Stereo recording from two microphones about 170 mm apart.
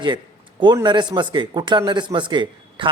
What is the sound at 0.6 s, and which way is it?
A man's voice, 25° right (ahead or behind).